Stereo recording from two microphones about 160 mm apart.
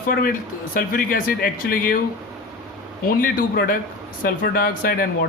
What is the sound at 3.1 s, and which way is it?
Speech, 65° left (ahead or behind).